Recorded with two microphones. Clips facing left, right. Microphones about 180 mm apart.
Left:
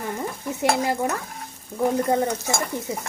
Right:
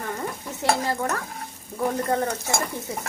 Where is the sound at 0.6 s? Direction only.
15° left (ahead or behind).